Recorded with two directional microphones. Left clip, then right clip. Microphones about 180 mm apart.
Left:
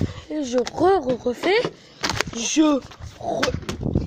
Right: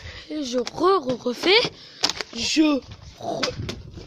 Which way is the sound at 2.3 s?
5° right (ahead or behind).